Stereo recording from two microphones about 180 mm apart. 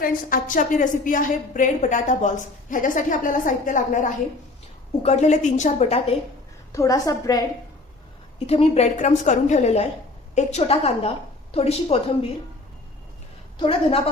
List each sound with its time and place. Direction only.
0.0 s a woman's voice: 50° left (ahead or behind)
6.7 s a woman's voice: 20° left (ahead or behind)
8.4 s a woman's voice: 35° left (ahead or behind)
13.6 s a woman's voice: 30° left (ahead or behind)